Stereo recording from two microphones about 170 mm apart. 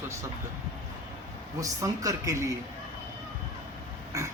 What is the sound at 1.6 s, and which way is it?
Speech, 20° right (ahead or behind).